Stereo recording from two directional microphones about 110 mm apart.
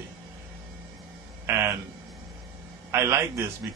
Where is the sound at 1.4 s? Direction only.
25° right (ahead or behind).